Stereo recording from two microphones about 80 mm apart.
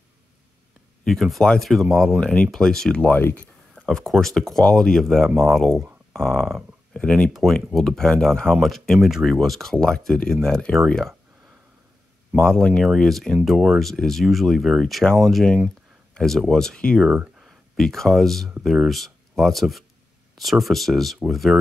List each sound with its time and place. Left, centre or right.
1.0 s speech: centre
3.0 s speech: left
3.8 s speech: centre
12.4 s speech: centre